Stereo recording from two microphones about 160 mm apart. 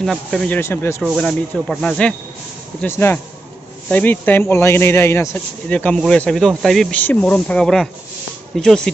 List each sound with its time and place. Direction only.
0.0 s speech: centre (ahead or behind)
0.5 s speech: 15° left (ahead or behind)
1.0 s speech: centre (ahead or behind)